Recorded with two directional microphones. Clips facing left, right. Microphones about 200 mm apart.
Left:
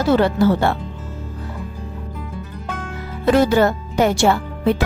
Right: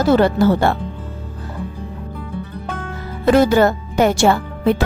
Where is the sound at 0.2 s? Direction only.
45° right (ahead or behind).